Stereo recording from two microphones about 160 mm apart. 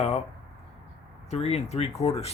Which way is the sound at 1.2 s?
40° left (ahead or behind).